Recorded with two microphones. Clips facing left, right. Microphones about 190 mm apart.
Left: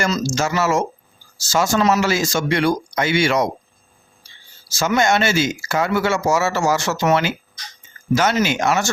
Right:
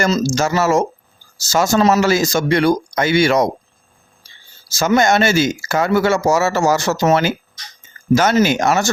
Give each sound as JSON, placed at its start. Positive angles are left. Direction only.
{"t": 0.2, "sound": "speech", "side_deg": -40}
{"t": 4.9, "sound": "speech", "side_deg": -40}